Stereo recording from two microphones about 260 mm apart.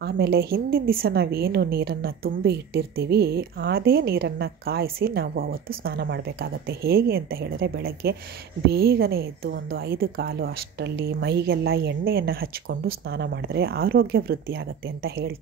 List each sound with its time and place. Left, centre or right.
0.0 s a woman's voice: right